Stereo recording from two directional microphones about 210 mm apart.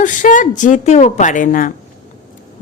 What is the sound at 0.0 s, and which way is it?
Speech, 40° left (ahead or behind).